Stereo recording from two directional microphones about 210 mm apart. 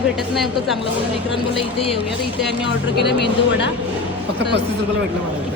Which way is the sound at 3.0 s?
55° left (ahead or behind).